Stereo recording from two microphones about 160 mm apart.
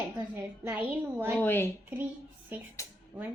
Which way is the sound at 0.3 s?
15° right (ahead or behind).